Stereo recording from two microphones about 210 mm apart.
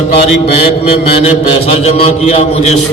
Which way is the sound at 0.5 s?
25° left (ahead or behind).